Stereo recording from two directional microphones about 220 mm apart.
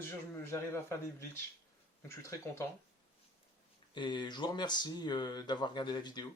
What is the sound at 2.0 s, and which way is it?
Speech, 10° left (ahead or behind).